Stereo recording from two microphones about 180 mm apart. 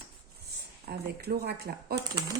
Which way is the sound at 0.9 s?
60° right (ahead or behind).